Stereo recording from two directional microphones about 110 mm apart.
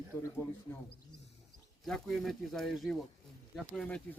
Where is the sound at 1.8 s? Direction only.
Centre (ahead or behind).